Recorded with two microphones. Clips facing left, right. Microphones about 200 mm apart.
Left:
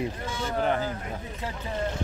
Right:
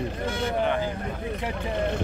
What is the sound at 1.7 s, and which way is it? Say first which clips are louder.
Vehicle: right 3 dB; 60° right (ahead or behind).